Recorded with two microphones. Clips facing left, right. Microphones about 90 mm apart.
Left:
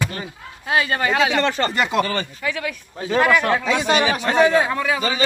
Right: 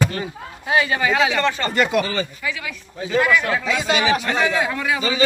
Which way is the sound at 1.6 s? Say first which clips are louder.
Right 1 dB; 25° left (ahead or behind).